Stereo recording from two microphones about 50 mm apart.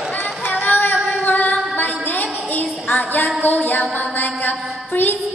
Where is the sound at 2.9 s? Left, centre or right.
Left.